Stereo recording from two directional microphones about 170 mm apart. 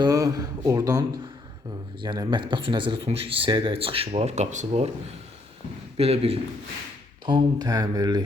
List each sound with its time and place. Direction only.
0.0 s speech: 20° right (ahead or behind); by 4.9 s 40° right (ahead or behind)
6.0 s speech: 35° right (ahead or behind)
7.3 s speech: 25° right (ahead or behind)